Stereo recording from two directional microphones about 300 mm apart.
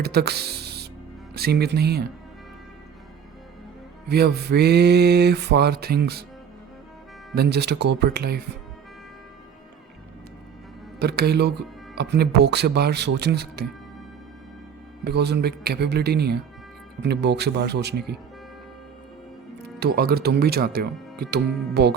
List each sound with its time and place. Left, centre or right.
0.0 s speech: right
1.4 s mantra: right
4.1 s mantra: right
7.3 s mantra: right
11.0 s mantra: right
15.0 s mantra: right
19.8 s mantra: right